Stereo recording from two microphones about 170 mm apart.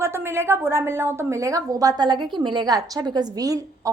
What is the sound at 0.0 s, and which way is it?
A woman's voice, 15° right (ahead or behind).